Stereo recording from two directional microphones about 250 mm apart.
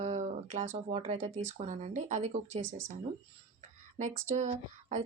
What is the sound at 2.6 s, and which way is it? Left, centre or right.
Speech, right.